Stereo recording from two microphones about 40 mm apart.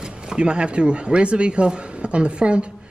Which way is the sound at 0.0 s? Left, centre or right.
Right.